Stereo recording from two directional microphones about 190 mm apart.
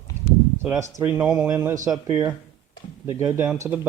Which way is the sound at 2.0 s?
20° right (ahead or behind).